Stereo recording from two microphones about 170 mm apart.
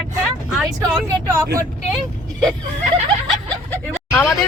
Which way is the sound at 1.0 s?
15° right (ahead or behind).